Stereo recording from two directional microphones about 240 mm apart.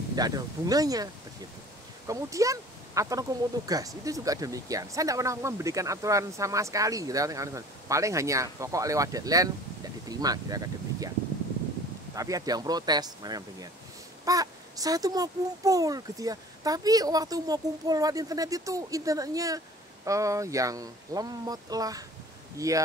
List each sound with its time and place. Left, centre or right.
0.1 s speech: centre
12.2 s speech: centre